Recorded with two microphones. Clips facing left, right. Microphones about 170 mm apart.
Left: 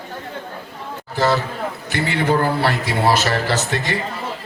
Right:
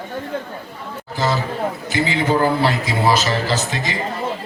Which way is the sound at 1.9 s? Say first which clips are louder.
Left 1 dB; 60° left (ahead or behind).